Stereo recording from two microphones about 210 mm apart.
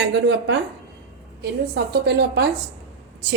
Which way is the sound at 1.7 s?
50° right (ahead or behind).